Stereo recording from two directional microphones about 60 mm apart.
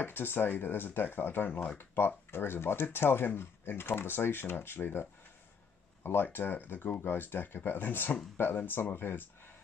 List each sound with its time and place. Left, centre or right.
0.0 s speech: left
6.0 s speech: left